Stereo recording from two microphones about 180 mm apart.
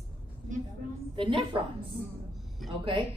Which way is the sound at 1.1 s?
30° right (ahead or behind).